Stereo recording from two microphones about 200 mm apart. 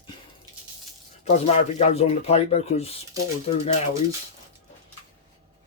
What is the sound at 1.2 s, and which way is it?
Speech, 30° left (ahead or behind).